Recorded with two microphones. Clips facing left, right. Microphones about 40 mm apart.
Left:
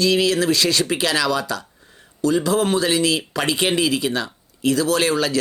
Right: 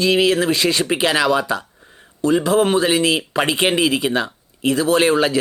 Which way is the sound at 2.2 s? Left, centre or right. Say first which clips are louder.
Right 3 dB; right.